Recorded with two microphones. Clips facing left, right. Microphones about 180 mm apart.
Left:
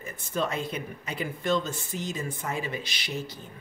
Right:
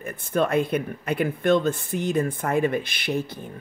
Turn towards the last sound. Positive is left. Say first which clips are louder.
# right 8 dB
turn(degrees=-55)  # may be behind; listen again after turning